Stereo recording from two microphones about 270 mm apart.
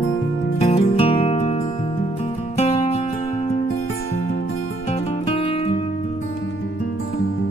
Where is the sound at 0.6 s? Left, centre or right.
Left.